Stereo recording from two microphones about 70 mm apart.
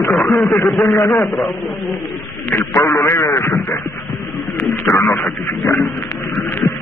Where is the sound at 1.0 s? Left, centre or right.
Left.